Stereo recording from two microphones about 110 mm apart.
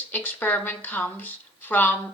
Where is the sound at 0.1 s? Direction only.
15° left (ahead or behind).